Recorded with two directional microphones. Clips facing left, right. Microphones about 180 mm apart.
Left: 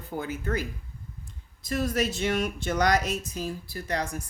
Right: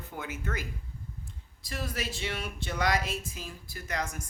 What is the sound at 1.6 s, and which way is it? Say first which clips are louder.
Speech: left 9 dB; 45° left (ahead or behind).